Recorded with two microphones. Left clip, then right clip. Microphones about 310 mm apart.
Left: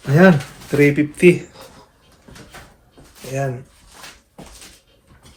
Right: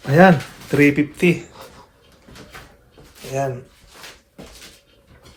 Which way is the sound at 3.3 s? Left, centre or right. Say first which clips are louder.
Right 1 dB; centre.